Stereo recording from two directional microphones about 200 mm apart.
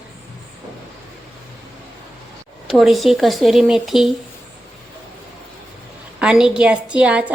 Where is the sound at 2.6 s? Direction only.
Centre (ahead or behind).